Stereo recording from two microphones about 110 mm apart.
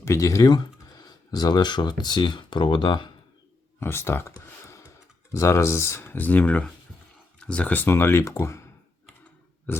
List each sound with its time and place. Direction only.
0.0 s speech: 30° left (ahead or behind); by 3.1 s 45° left (ahead or behind)
3.8 s speech: 20° left (ahead or behind)
5.3 s speech: 25° left (ahead or behind)